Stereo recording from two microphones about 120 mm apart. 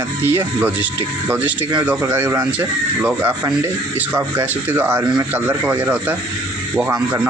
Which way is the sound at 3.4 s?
15° right (ahead or behind).